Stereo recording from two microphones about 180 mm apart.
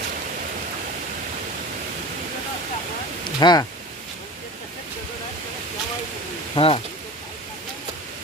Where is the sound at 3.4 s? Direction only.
20° left (ahead or behind).